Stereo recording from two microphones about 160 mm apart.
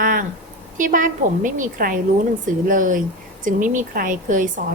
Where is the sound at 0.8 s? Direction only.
55° right (ahead or behind).